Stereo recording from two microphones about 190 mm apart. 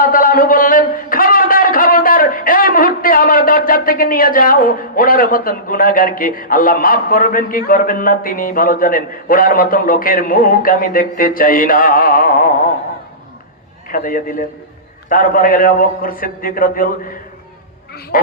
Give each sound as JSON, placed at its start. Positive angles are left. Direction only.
{"t": 0.0, "sound": "a man's voice", "side_deg": 45}
{"t": 13.9, "sound": "speech", "side_deg": 45}
{"t": 18.1, "sound": "speech", "side_deg": 45}